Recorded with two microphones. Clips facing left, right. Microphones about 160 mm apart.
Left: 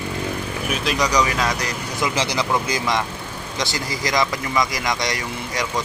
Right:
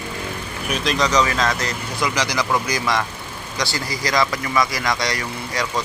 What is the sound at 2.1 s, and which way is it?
Speech, 25° left (ahead or behind).